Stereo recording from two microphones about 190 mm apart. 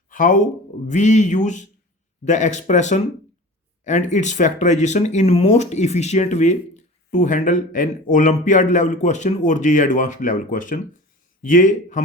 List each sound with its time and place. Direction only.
0.1 s a man's voice: 45° left (ahead or behind)